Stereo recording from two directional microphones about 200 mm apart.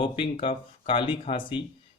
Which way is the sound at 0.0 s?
25° left (ahead or behind).